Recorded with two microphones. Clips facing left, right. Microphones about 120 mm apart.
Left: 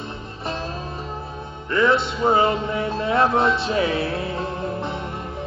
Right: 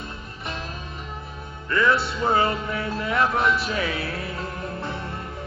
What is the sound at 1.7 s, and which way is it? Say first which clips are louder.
Music: left 3 dB; 20° left (ahead or behind).